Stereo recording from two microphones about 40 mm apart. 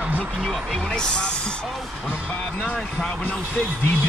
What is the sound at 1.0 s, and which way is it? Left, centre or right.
Speech, left.